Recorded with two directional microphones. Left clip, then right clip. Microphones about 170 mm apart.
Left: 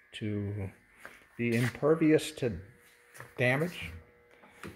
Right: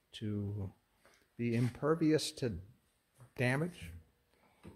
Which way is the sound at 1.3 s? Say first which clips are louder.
Left 6 dB; 15° right (ahead or behind).